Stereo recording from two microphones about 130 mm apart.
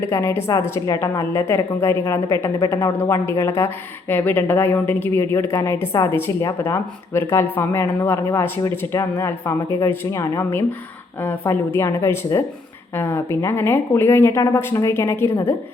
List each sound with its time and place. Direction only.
0.1 s a woman's voice: 20° left (ahead or behind)